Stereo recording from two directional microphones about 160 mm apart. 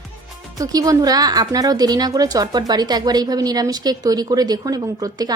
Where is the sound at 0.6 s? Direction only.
20° right (ahead or behind).